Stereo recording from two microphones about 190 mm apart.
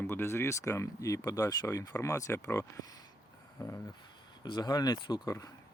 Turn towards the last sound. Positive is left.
turn(degrees=20)  # may be behind; listen again after turning